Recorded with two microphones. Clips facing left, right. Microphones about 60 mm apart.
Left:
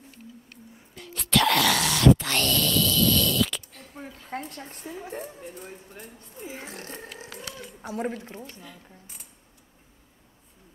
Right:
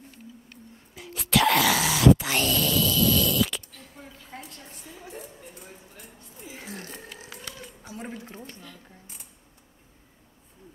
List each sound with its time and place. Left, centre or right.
0.9 s dog: centre
2.0 s groan: centre
3.7 s a sound: left
4.6 s a woman's voice: left
6.1 s speech: left
7.8 s speech: left